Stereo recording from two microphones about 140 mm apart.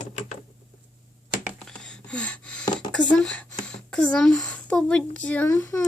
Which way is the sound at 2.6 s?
35° left (ahead or behind).